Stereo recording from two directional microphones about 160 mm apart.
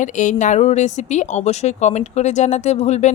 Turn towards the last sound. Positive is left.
turn(degrees=45)  # may be behind; listen again after turning